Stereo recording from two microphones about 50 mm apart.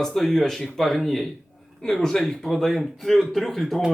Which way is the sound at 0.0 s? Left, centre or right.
Centre.